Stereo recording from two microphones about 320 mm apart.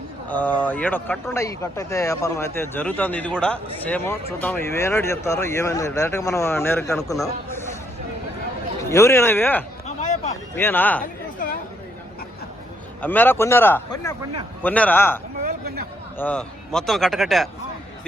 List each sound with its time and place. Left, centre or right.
0.3 s speech: centre
8.9 s speech: centre
9.8 s a sound: left
10.5 s a man's voice: centre
13.0 s a man's voice: centre
15.4 s chatter: right
16.1 s a man's voice: centre